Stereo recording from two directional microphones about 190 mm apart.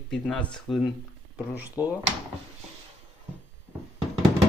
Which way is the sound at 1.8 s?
20° left (ahead or behind).